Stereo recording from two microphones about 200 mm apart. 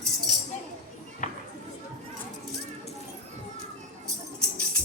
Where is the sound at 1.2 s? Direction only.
35° left (ahead or behind).